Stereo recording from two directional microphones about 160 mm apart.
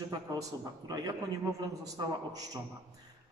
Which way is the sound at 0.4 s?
20° right (ahead or behind).